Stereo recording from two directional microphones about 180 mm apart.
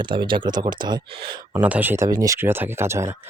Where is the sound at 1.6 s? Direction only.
10° right (ahead or behind).